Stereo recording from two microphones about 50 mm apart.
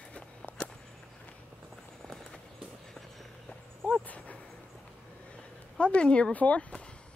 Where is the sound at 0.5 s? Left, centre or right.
Left.